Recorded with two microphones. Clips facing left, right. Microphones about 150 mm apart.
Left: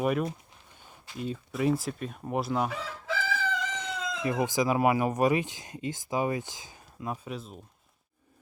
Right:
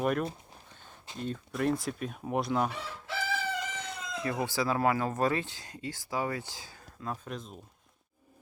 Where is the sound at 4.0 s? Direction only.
90° left.